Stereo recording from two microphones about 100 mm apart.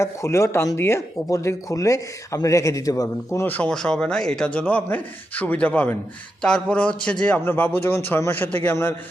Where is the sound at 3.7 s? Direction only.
5° left (ahead or behind).